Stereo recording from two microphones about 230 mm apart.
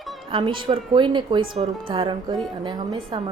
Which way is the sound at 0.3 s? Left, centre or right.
Right.